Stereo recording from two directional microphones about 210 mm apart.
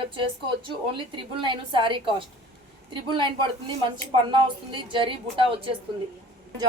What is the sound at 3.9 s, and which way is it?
A woman's voice, 25° right (ahead or behind).